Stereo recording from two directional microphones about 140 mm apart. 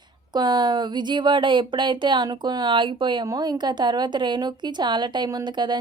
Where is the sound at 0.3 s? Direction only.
30° right (ahead or behind).